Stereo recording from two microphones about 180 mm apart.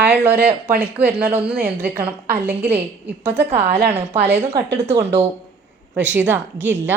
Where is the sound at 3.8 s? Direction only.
35° right (ahead or behind).